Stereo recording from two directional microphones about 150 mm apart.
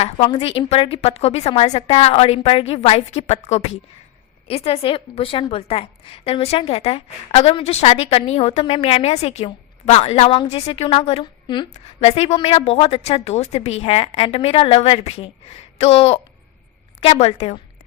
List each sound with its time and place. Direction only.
0.3 s a woman's voice: 35° left (ahead or behind)
11.7 s a woman's voice: 45° left (ahead or behind)